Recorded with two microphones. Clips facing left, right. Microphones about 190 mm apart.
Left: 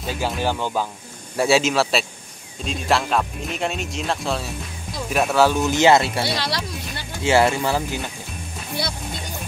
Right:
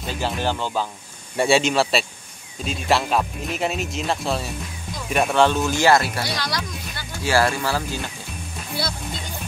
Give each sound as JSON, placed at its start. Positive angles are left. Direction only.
{"t": 0.0, "sound": "speech", "side_deg": 5}
{"t": 1.3, "sound": "speech", "side_deg": 0}
{"t": 5.7, "sound": "speech", "side_deg": 20}